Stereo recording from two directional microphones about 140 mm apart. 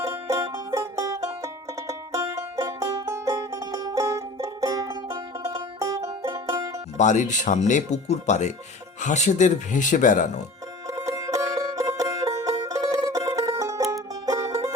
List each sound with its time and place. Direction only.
0.0 s music: 20° right (ahead or behind)
6.9 s speech: 60° left (ahead or behind)
10.8 s music: 25° right (ahead or behind)